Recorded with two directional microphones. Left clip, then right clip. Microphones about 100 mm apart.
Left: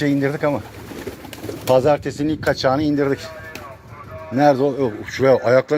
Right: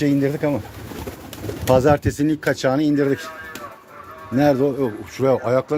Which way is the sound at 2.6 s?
90° right.